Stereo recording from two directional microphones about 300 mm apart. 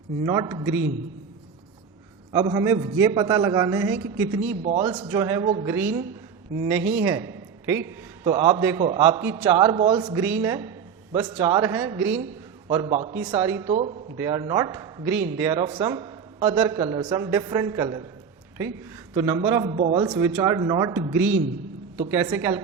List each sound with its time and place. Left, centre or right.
0.3 s a man's voice: centre
2.3 s a man's voice: centre
4.6 s a man's voice: centre
5.6 s a man's voice: centre
19.1 s a man's voice: centre